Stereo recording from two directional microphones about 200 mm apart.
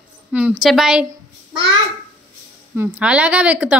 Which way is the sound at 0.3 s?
5° right (ahead or behind).